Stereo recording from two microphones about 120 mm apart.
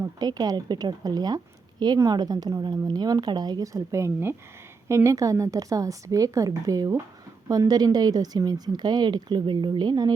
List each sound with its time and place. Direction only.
0.0 s a woman's voice: 35° right (ahead or behind)